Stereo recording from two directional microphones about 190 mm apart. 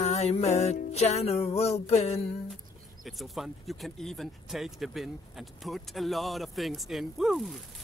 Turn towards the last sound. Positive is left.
turn(degrees=0)  # may be behind; listen again after turning